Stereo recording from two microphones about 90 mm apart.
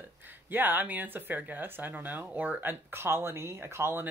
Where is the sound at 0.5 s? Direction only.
20° right (ahead or behind).